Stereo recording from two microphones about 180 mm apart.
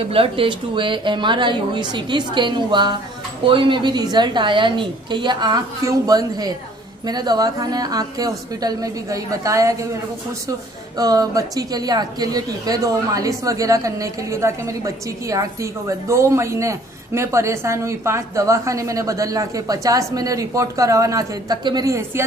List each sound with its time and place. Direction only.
0.1 s speech: 30° right (ahead or behind)
11.0 s a woman's voice: 20° right (ahead or behind)